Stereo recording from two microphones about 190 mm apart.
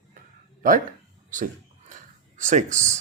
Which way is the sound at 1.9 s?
40° right (ahead or behind).